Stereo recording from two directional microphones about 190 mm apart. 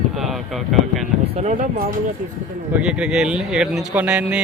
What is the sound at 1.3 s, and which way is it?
Speech, 40° right (ahead or behind).